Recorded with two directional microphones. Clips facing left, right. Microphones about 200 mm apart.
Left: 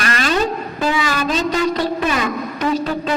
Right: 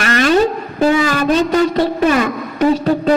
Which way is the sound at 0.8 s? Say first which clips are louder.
Right 6 dB; 45° right (ahead or behind).